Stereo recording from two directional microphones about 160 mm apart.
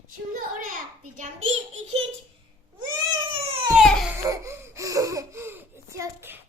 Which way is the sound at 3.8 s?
5° left (ahead or behind).